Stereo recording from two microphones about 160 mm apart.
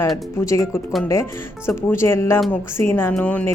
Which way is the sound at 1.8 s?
15° left (ahead or behind).